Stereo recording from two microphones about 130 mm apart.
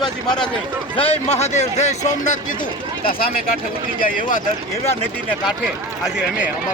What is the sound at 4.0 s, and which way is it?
Speech, 90° left.